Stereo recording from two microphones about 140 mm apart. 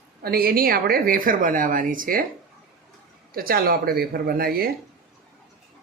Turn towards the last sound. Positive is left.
turn(degrees=-90)